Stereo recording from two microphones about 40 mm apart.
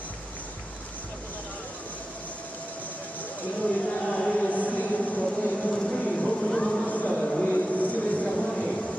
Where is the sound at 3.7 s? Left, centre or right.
Left.